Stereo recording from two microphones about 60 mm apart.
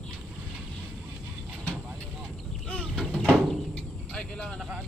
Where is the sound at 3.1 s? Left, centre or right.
Left.